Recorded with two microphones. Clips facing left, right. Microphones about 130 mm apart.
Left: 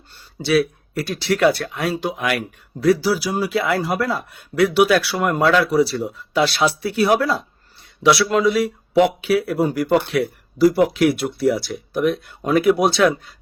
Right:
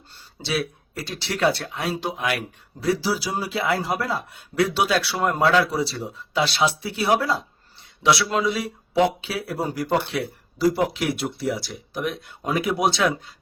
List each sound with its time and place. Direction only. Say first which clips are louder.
0.4 s a man's voice: left 9 dB; 25° right (ahead or behind)
11.3 s speech: left 8 dB; 65° left (ahead or behind)
12.1 s a man's voice: left 7 dB; 20° right (ahead or behind)